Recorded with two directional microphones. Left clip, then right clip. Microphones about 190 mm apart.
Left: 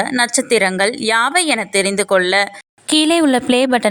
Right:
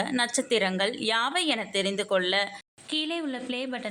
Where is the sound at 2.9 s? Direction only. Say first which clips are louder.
Left 17 dB; 65° left (ahead or behind).